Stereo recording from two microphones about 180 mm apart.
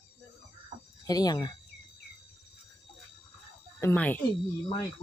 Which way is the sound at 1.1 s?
20° left (ahead or behind).